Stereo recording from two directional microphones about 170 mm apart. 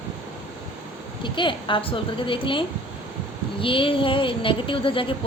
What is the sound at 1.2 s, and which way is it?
A woman's voice, 30° left (ahead or behind).